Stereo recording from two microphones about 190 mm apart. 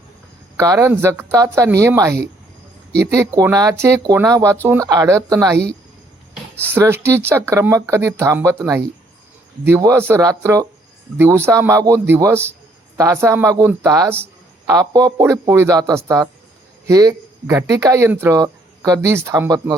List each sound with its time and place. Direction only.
0.5 s speech: 15° right (ahead or behind)
6.6 s speech: 10° right (ahead or behind)